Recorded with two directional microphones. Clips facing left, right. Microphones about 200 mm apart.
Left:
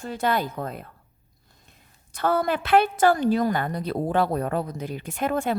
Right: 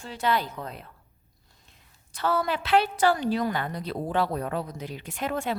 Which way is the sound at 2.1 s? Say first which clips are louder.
Left 3 dB; 50° left (ahead or behind).